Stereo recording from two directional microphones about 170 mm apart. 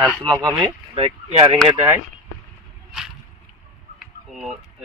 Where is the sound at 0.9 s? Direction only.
35° right (ahead or behind).